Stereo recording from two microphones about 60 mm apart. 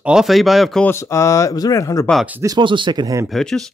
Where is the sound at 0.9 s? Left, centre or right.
Left.